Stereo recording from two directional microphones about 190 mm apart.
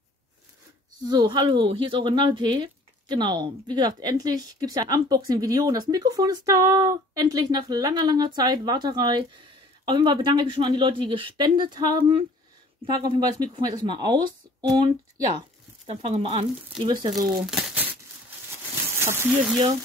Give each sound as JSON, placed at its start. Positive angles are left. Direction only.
{"t": 1.0, "sound": "speech", "side_deg": -20}
{"t": 17.3, "sound": "speech", "side_deg": -5}
{"t": 18.9, "sound": "a sound", "side_deg": -15}